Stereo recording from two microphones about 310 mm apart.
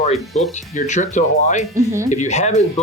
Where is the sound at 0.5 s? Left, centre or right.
Left.